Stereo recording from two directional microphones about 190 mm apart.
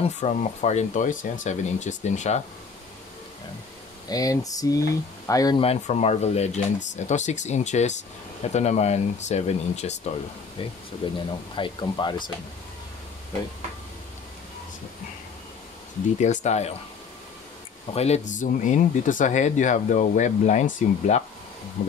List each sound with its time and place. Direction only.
0.0 s speech: 40° left (ahead or behind)
4.1 s speech: 20° left (ahead or behind)
5.6 s speech: 35° left (ahead or behind)
16.2 s speech: 40° left (ahead or behind)
17.9 s speech: 35° left (ahead or behind)